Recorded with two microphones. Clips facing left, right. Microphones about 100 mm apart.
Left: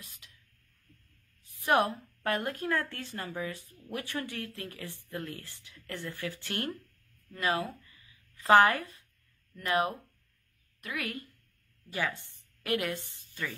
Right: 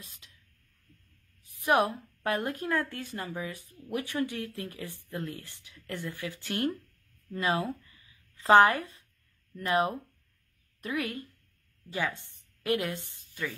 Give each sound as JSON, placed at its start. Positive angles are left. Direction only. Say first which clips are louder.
{"t": 1.5, "sound": "a woman's voice", "louder": "right 1 dB", "side_deg": -15}
{"t": 13.3, "sound": "speech", "louder": "right 2 dB", "side_deg": -5}